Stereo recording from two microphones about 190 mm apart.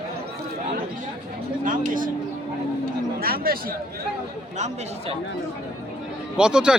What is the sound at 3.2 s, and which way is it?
Speech, 50° right (ahead or behind).